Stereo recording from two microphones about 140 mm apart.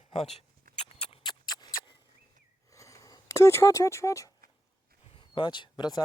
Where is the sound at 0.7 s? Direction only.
90° right.